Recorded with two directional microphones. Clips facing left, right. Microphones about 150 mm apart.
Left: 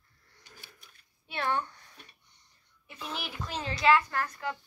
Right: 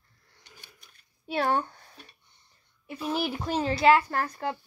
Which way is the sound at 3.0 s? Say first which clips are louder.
Right 10 dB; 10° right (ahead or behind).